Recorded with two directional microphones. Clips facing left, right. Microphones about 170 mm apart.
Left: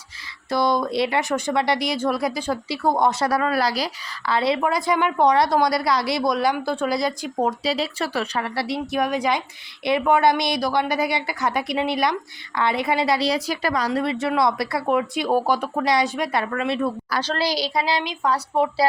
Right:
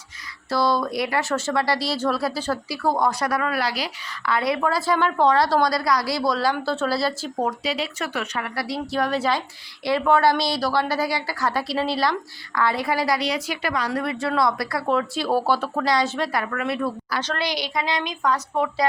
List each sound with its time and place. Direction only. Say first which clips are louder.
0.5 s speech: left 1 dB; 20° left (ahead or behind)
4.6 s speech: even; 15° left (ahead or behind)
7.6 s a woman's voice: left 3 dB; 35° left (ahead or behind)
13.9 s a woman's voice: left 2 dB; 25° left (ahead or behind)